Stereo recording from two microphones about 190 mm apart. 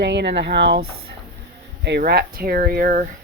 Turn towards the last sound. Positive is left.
turn(degrees=-50)  # may be behind; listen again after turning